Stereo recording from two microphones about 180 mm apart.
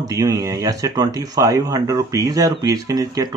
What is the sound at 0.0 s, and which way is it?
Speech, 20° right (ahead or behind).